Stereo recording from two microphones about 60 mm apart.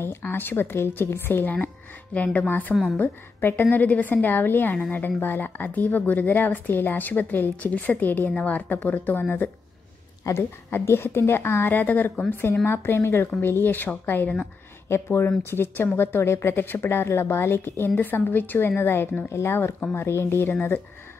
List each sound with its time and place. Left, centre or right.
0.2 s speech: left
12.6 s a woman's voice: left
14.9 s a woman's voice: left